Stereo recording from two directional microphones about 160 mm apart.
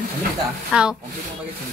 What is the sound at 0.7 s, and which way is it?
Speech, 5° right (ahead or behind).